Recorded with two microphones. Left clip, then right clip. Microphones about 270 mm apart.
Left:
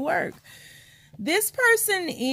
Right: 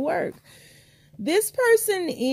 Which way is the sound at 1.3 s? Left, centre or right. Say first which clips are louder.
Right 2 dB; left.